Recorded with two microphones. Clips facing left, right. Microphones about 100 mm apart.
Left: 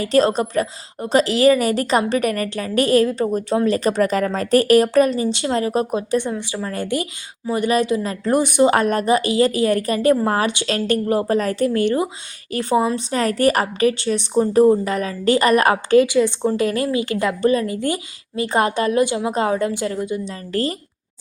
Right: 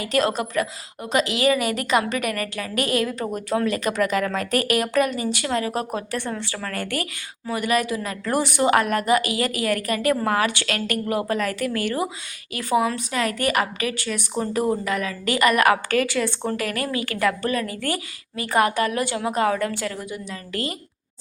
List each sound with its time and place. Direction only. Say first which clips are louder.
0.0 s a woman's voice: left 6 dB; 30° left (ahead or behind)
5.9 s a woman's voice: left 7 dB; 20° left (ahead or behind)
8.7 s a woman's voice: left 2 dB; 30° left (ahead or behind)